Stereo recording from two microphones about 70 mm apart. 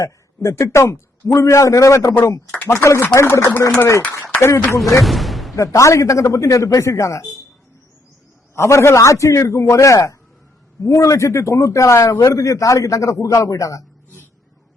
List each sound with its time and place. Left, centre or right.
0.0 s a man's voice: left
3.2 s speech: left
4.1 s a sound: left
4.9 s a sound: centre
5.5 s a man's voice: left
8.5 s a man's voice: left